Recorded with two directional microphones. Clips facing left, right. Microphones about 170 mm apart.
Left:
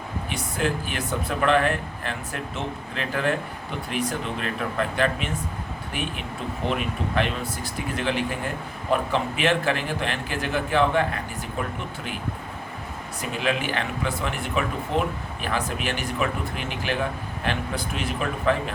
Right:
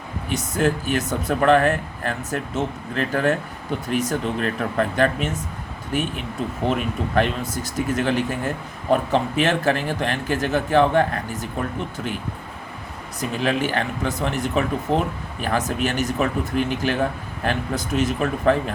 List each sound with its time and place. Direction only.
0.3 s speech: 40° right (ahead or behind)
7.2 s speech: 45° right (ahead or behind)
13.4 s speech: 40° right (ahead or behind)